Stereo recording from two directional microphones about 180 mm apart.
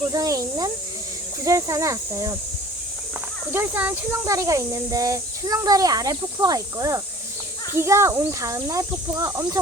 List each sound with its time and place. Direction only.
0.1 s speech: 20° right (ahead or behind)
3.5 s speech: 10° right (ahead or behind)